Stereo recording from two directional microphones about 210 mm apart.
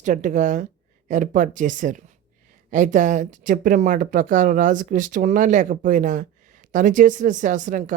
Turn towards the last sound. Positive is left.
turn(degrees=-35)  # may be behind; listen again after turning